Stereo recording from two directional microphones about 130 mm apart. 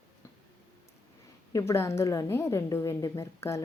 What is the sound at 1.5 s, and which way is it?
A woman's voice, 25° left (ahead or behind).